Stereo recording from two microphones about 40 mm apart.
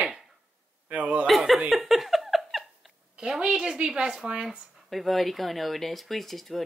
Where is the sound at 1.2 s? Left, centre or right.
Centre.